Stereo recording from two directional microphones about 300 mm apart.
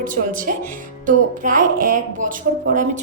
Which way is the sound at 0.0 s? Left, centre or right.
Right.